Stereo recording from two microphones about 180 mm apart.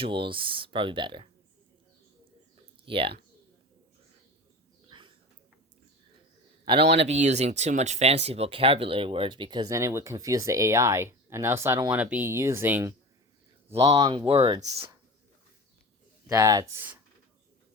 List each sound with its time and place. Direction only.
0.0 s speech: 30° right (ahead or behind)
2.8 s speech: 30° right (ahead or behind)
4.9 s a sound: 25° right (ahead or behind)
6.7 s speech: 35° right (ahead or behind); by 12.9 s 10° right (ahead or behind)
14.3 s speech: 35° right (ahead or behind)
16.3 s speech: 20° right (ahead or behind)